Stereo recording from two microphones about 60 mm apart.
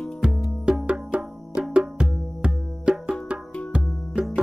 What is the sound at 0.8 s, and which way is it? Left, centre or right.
Music, centre.